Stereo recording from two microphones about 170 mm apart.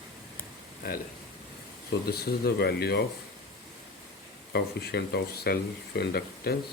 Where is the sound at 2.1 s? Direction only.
65° left (ahead or behind).